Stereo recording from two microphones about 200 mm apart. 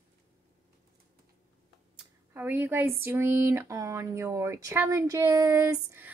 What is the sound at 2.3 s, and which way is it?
Speech, 10° right (ahead or behind).